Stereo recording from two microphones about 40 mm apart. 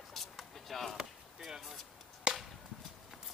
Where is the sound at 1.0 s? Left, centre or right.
Centre.